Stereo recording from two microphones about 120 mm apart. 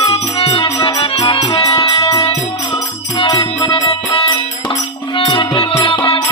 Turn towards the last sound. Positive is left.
turn(degrees=45)  # may be behind; listen again after turning